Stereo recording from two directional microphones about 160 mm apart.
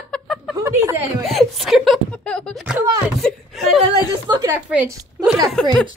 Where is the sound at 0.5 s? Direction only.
15° right (ahead or behind).